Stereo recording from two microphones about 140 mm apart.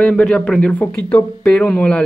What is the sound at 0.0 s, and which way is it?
Speech, 5° left (ahead or behind).